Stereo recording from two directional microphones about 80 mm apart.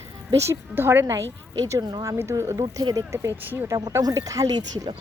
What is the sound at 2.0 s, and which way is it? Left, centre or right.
Speech, right.